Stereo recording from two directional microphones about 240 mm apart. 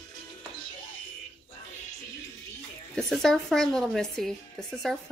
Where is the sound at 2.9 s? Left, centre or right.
Centre.